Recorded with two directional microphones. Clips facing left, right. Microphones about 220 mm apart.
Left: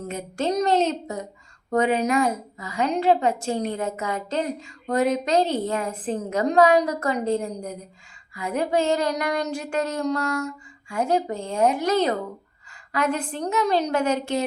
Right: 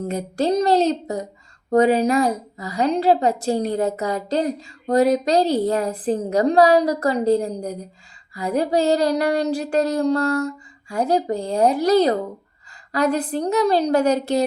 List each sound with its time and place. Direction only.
0.1 s a woman's voice: 35° right (ahead or behind)